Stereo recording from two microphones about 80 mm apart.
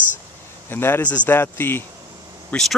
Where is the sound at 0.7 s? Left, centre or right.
Left.